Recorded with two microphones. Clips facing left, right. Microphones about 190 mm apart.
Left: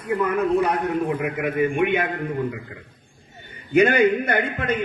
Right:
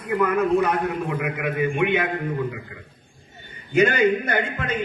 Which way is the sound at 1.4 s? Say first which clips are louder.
Left 2 dB; 45° left (ahead or behind).